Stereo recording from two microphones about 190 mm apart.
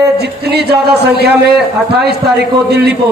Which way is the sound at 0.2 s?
60° right (ahead or behind).